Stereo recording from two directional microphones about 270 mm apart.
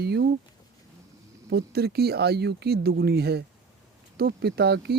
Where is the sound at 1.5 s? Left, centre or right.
Right.